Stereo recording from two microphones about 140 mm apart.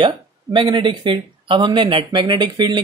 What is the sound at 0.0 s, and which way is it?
Speech, 35° right (ahead or behind).